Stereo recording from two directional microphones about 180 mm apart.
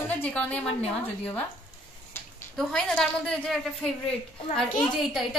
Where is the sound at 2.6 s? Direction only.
5° left (ahead or behind).